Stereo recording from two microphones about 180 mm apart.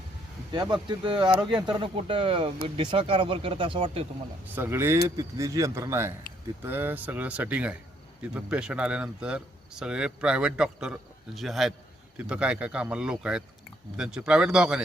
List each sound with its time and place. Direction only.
0.5 s speech: 25° right (ahead or behind)
4.4 s speech: 10° right (ahead or behind)